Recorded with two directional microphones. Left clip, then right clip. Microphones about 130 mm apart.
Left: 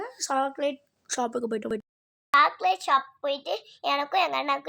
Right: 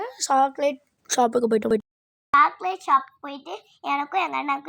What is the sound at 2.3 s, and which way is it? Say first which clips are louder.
A child's voice: right 2 dB; 25° left (ahead or behind).